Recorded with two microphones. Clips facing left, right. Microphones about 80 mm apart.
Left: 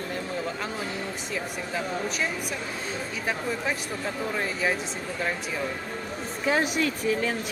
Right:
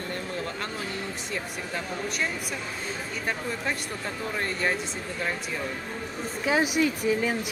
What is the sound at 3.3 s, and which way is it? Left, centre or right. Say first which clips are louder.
A woman's voice: left 2 dB; centre.